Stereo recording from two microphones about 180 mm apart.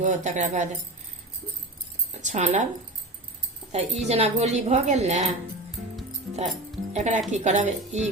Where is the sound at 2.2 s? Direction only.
40° right (ahead or behind).